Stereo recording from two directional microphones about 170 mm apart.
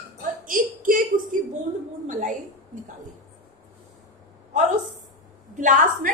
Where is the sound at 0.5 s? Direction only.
55° right (ahead or behind).